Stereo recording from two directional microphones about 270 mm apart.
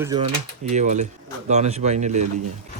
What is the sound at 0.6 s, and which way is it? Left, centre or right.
Speech, right.